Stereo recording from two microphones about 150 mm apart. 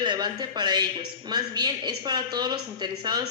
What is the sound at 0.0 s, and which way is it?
Speech, 30° right (ahead or behind).